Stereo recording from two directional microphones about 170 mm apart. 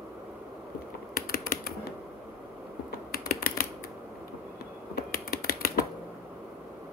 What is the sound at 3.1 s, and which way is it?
Typing, 60° left (ahead or behind).